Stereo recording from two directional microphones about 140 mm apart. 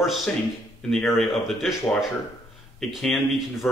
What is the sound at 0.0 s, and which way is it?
A man's voice, centre (ahead or behind).